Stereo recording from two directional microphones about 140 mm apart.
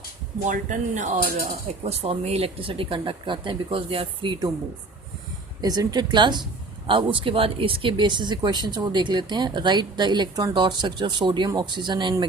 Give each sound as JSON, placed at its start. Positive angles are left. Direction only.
{"t": 0.4, "sound": "speech", "side_deg": -65}
{"t": 1.8, "sound": "speech", "side_deg": -45}
{"t": 5.6, "sound": "speech", "side_deg": -30}